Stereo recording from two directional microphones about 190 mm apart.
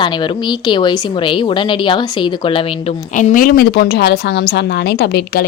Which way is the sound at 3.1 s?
45° left (ahead or behind).